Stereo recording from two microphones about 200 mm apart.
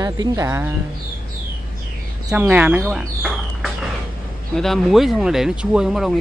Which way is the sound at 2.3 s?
10° right (ahead or behind).